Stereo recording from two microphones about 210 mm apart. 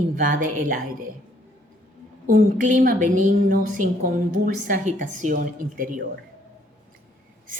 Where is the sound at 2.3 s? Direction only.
40° right (ahead or behind).